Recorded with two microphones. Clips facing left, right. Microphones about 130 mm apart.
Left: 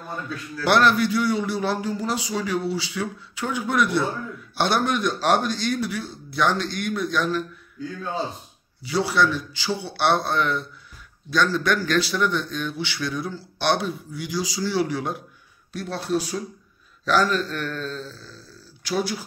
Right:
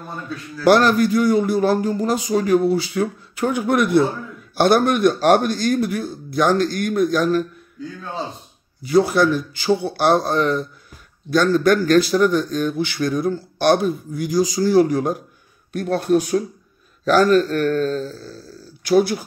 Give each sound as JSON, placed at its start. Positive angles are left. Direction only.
{"t": 0.7, "sound": "a man's voice", "side_deg": -40}
{"t": 8.8, "sound": "a man's voice", "side_deg": -50}
{"t": 11.2, "sound": "a man's voice", "side_deg": -50}